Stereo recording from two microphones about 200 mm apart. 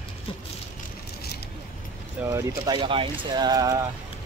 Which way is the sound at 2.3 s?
15° right (ahead or behind).